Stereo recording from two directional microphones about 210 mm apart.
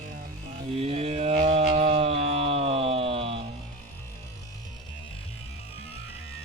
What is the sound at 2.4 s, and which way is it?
Music, 30° right (ahead or behind).